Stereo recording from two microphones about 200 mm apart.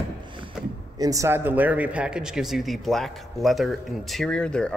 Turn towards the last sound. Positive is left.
turn(degrees=5)  # may be behind; listen again after turning